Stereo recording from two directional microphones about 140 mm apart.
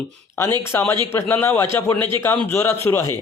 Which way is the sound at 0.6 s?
15° left (ahead or behind).